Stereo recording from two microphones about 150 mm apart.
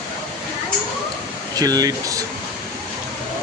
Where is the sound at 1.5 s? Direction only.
25° right (ahead or behind).